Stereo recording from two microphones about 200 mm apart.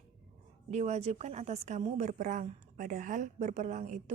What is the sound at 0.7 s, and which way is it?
A woman's voice, 35° right (ahead or behind).